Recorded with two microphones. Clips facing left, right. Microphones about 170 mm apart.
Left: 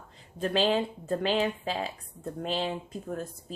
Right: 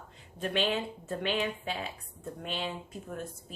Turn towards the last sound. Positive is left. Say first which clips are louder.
# left 4 dB
turn(degrees=40)  # may be behind; listen again after turning